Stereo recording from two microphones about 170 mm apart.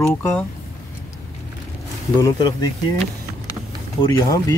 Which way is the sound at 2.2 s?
20° left (ahead or behind).